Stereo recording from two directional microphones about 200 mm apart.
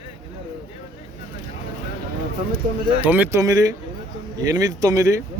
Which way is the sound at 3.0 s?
10° right (ahead or behind).